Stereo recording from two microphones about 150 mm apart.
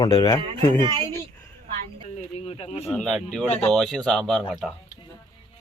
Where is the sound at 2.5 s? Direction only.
40° left (ahead or behind).